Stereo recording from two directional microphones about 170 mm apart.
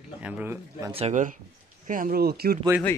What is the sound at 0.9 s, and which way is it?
Speech, 45° right (ahead or behind).